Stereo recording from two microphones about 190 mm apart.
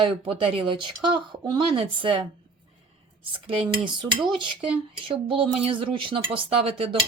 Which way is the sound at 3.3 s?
30° right (ahead or behind).